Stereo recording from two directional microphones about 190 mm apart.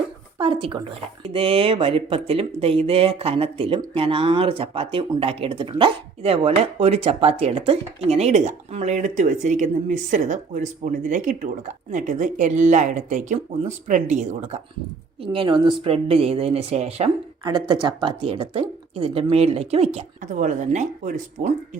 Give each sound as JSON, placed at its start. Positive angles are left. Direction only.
{"t": 0.3, "sound": "a woman's voice", "side_deg": -25}
{"t": 15.2, "sound": "speech", "side_deg": -25}
{"t": 17.4, "sound": "speech", "side_deg": -25}